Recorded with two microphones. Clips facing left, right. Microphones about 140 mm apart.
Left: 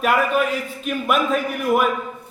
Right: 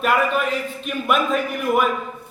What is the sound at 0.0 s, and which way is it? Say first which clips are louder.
A man's voice: left 1 dB; 5° left (ahead or behind).